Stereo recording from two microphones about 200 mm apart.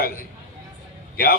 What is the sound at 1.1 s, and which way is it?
Speech, 50° left (ahead or behind).